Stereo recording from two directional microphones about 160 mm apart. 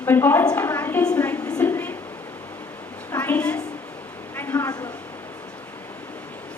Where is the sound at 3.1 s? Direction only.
10° left (ahead or behind).